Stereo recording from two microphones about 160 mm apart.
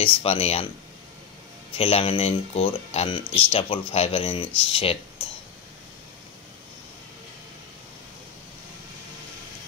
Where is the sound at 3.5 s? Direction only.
35° left (ahead or behind).